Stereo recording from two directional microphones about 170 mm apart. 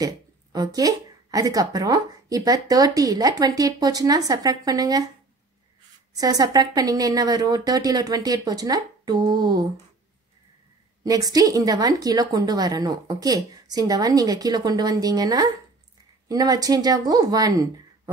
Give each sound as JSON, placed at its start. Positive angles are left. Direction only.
{"t": 0.0, "sound": "speech", "side_deg": -20}
{"t": 6.1, "sound": "speech", "side_deg": -20}
{"t": 11.1, "sound": "speech", "side_deg": -20}